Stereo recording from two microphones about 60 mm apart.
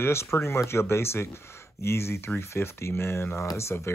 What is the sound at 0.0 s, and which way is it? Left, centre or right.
Speech, left.